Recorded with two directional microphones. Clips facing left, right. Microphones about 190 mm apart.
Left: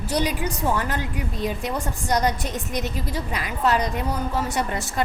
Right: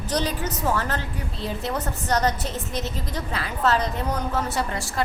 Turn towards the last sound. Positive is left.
turn(degrees=20)  # may be behind; listen again after turning